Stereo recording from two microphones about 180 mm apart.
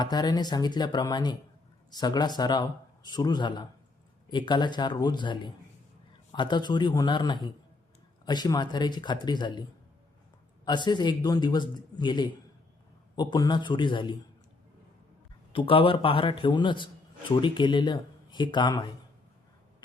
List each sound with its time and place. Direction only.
0.0 s a man's voice: 20° left (ahead or behind)
10.7 s a man's voice: 25° left (ahead or behind)
15.5 s a man's voice: 30° left (ahead or behind)